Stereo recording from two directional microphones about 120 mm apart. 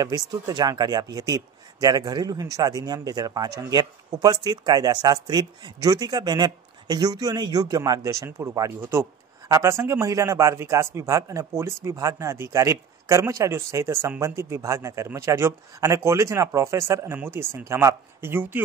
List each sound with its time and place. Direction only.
0.0 s a man's voice: 30° right (ahead or behind)